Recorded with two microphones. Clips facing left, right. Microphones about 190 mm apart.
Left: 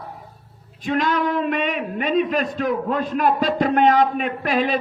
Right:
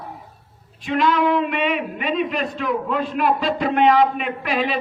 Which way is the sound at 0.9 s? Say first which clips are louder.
Right 2 dB; 40° left (ahead or behind).